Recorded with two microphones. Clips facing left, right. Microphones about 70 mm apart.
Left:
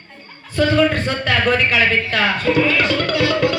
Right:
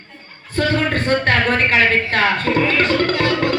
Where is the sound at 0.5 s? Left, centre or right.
Right.